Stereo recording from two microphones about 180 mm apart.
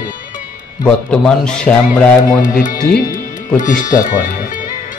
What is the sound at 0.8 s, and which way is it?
Speech, 5° left (ahead or behind).